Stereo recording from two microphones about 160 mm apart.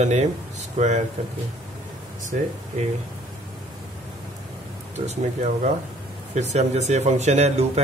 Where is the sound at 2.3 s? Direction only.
50° right (ahead or behind).